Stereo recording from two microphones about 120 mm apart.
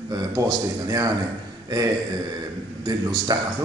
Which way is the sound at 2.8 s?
35° right (ahead or behind).